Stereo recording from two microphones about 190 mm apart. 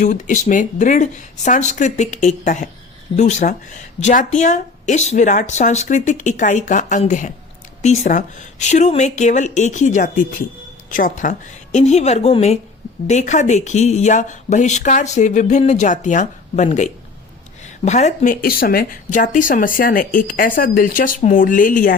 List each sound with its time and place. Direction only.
0.0 s speech: 40° left (ahead or behind)